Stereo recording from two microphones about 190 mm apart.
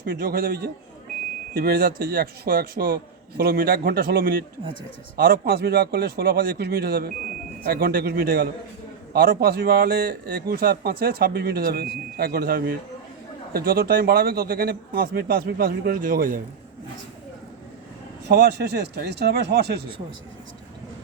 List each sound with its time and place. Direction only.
0.0 s a man's voice: 50° right (ahead or behind)
18.3 s a man's voice: 55° right (ahead or behind)